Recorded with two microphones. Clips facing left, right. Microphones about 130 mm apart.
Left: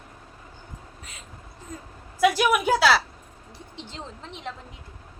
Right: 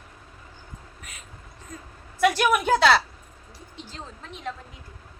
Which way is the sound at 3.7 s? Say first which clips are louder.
Left 1 dB; 25° left (ahead or behind).